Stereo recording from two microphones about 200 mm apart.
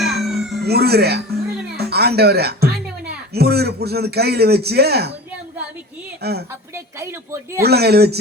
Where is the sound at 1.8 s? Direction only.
55° right (ahead or behind).